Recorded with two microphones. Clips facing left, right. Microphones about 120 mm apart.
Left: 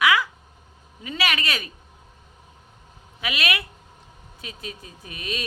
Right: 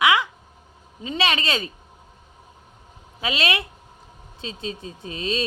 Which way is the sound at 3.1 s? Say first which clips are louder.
Right 3 dB; 25° right (ahead or behind).